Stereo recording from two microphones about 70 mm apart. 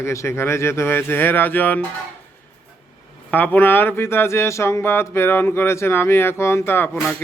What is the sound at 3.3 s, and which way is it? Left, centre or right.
Speech, left.